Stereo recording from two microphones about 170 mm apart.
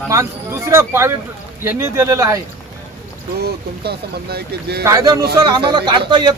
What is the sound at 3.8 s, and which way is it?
Speech, 70° right (ahead or behind).